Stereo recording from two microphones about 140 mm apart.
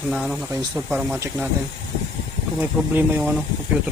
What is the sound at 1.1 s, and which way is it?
Speech, 20° right (ahead or behind).